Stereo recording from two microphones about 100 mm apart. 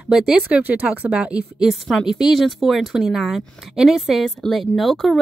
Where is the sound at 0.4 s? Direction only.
15° right (ahead or behind).